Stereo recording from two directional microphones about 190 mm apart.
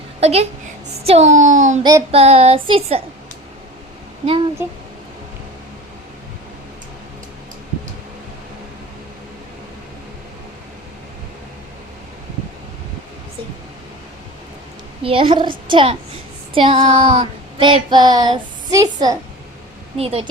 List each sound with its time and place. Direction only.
0.2 s a woman's voice: 35° right (ahead or behind)
1.8 s a woman's voice: 20° right (ahead or behind)
2.1 s speech: 35° right (ahead or behind)
15.0 s a woman's voice: 30° right (ahead or behind)
20.0 s speech: 30° right (ahead or behind)